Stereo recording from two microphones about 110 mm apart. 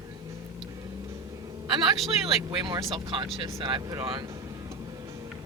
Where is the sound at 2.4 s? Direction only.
40° right (ahead or behind).